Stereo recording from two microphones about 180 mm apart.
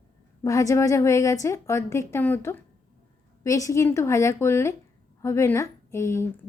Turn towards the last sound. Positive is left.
turn(degrees=15)  # may be behind; listen again after turning